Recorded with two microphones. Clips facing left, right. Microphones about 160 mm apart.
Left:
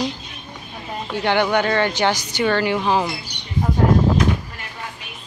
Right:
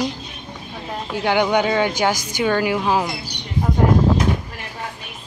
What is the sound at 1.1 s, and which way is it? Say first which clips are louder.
Speech: right 1 dB; 10° right (ahead or behind).